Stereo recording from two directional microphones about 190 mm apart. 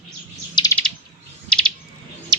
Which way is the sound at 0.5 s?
20° left (ahead or behind).